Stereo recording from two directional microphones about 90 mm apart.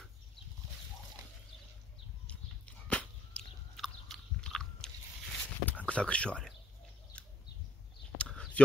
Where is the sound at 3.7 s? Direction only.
Centre (ahead or behind).